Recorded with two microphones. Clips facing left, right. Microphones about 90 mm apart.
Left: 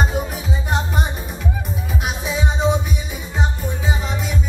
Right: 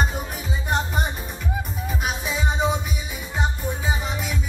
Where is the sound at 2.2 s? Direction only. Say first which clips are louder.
Left 4 dB; centre (ahead or behind).